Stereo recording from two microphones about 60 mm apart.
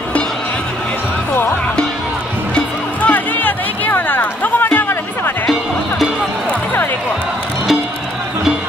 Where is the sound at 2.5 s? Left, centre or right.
Left.